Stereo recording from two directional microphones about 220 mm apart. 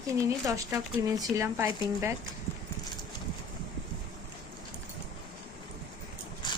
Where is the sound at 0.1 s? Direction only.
15° right (ahead or behind).